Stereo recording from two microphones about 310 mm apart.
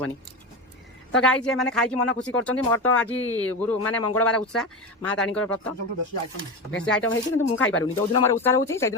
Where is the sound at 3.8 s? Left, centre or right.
Left.